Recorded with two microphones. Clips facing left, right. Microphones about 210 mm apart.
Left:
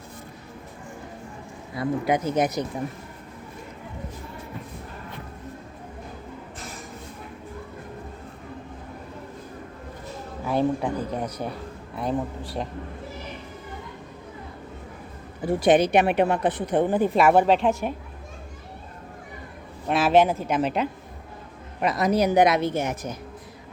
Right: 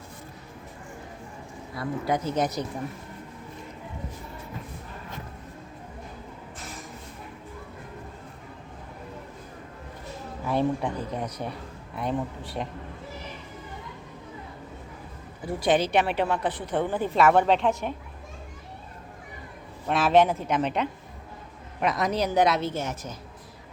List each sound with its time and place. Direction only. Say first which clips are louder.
1.7 s a woman's voice: left 4 dB; 20° left (ahead or behind)
10.4 s speech: left 2 dB; centre (ahead or behind)
15.4 s a woman's voice: left 5 dB; 20° left (ahead or behind)
19.9 s a woman's voice: left 2 dB; 5° left (ahead or behind)